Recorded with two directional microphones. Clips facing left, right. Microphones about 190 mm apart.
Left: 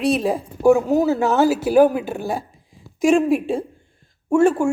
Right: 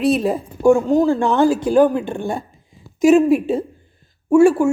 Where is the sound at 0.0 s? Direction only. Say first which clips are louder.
Right 2 dB; centre (ahead or behind).